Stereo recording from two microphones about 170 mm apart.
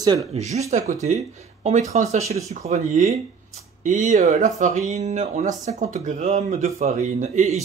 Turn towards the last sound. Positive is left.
turn(degrees=-45)  # may be behind; listen again after turning